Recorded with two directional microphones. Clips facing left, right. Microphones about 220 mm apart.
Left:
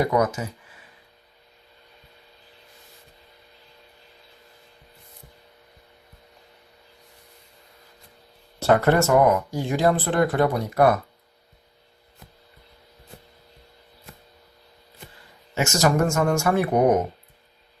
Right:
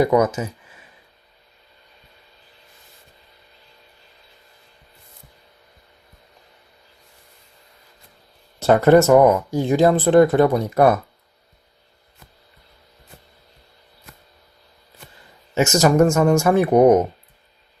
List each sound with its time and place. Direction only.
0.0 s speech: 20° right (ahead or behind)
8.5 s speech: 20° right (ahead or behind)
15.5 s speech: 20° right (ahead or behind)